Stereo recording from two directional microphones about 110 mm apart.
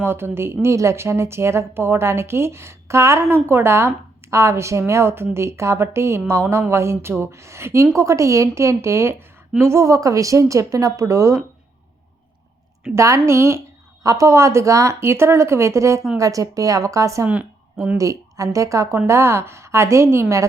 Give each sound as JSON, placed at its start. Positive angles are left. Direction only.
{"t": 0.0, "sound": "a woman's voice", "side_deg": -20}
{"t": 12.9, "sound": "a woman's voice", "side_deg": -30}